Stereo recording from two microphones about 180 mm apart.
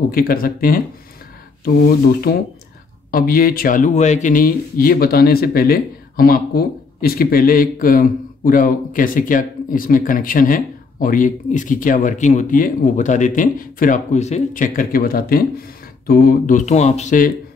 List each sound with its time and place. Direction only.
0.1 s speech: 55° left (ahead or behind)
2.3 s speech: 60° left (ahead or behind)